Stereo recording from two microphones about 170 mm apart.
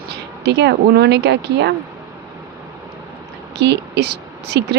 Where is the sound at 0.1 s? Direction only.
85° right.